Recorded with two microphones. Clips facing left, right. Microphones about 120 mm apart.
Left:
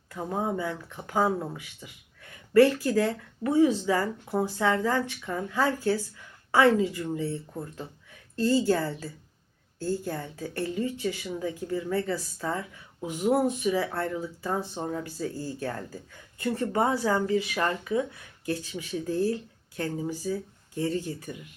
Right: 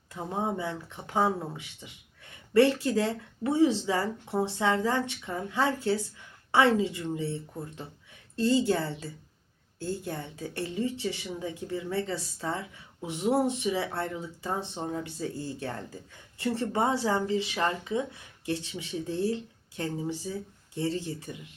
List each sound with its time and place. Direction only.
0.1 s speech: 25° right (ahead or behind)
8.4 s speech: 25° right (ahead or behind)